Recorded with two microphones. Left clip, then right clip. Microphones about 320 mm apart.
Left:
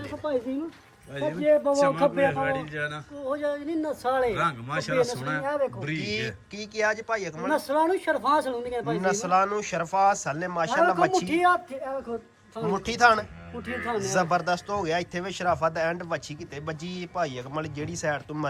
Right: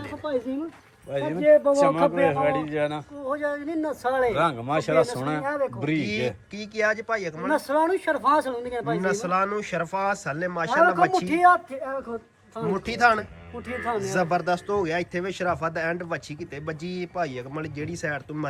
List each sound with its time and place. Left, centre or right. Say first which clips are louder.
0.0 s a sound: even; centre
1.1 s a man's voice: right 2 dB; centre
1.4 s speech: right 4 dB; centre
1.7 s a man's voice: right 2 dB; centre
3.2 s a man's voice: right 1 dB; centre
5.4 s speech: right 1 dB; centre